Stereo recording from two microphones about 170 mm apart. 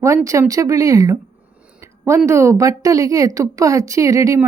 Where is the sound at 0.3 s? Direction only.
20° right (ahead or behind).